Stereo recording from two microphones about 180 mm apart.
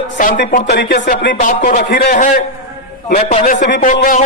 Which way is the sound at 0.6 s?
65° left (ahead or behind).